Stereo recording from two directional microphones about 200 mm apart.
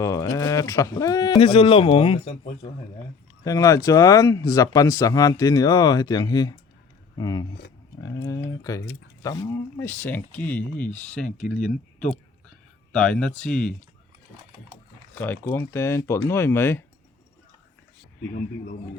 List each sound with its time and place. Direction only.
0.0 s speech: 15° left (ahead or behind)
15.2 s speech: 10° left (ahead or behind)